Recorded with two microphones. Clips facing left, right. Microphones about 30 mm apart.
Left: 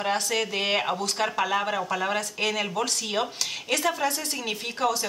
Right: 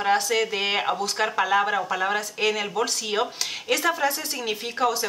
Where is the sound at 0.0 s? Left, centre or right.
Centre.